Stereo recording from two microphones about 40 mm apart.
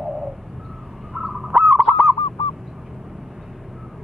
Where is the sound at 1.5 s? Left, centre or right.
Right.